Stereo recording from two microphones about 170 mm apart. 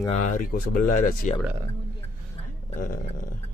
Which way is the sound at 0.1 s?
50° left (ahead or behind).